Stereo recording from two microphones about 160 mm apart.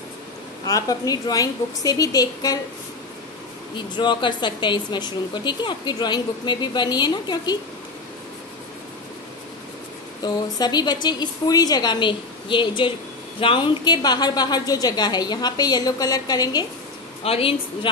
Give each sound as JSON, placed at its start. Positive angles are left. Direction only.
{"t": 0.7, "sound": "a woman's voice", "side_deg": 20}
{"t": 3.7, "sound": "a woman's voice", "side_deg": 30}
{"t": 10.2, "sound": "a woman's voice", "side_deg": 25}
{"t": 17.2, "sound": "a woman's voice", "side_deg": 35}